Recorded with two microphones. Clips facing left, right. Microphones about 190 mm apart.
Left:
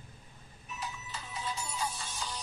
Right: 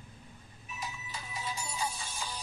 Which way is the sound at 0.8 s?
10° right (ahead or behind).